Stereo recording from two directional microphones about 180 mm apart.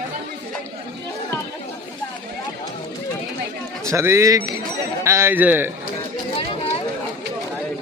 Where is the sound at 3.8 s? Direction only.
15° right (ahead or behind).